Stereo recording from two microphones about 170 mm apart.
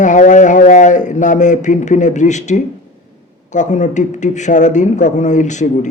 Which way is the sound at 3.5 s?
45° left (ahead or behind).